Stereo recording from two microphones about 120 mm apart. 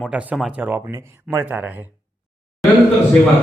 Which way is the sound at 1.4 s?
15° right (ahead or behind).